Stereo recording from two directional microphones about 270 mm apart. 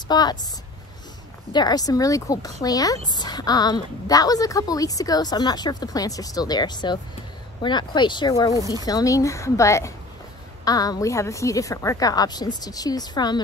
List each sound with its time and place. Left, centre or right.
0.1 s a woman's voice: centre
1.5 s a woman's voice: centre